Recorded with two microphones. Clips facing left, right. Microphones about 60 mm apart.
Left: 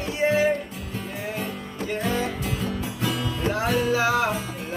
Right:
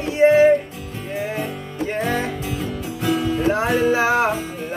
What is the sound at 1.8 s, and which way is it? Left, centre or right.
Music, right.